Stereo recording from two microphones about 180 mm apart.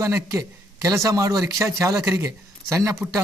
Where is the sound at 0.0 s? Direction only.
15° right (ahead or behind).